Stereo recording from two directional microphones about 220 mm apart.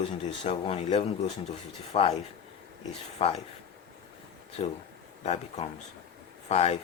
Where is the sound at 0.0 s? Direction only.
25° left (ahead or behind).